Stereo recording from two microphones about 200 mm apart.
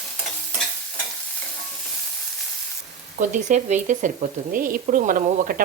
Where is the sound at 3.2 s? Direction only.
40° right (ahead or behind).